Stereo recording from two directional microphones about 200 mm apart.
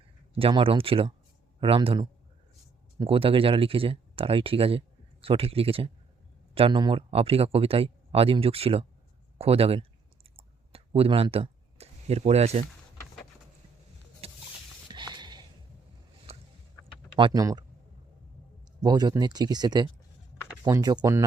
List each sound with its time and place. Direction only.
0.3 s speech: 25° right (ahead or behind)
10.3 s clicking: 30° right (ahead or behind)
14.2 s a sound: 30° right (ahead or behind)
16.3 s boat: 30° right (ahead or behind)
17.2 s speech: 20° right (ahead or behind)
18.8 s speech: 20° right (ahead or behind)